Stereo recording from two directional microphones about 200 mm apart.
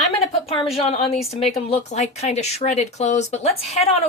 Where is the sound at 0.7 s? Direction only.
30° left (ahead or behind).